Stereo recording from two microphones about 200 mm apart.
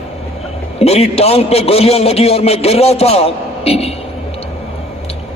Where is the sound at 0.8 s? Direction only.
30° left (ahead or behind).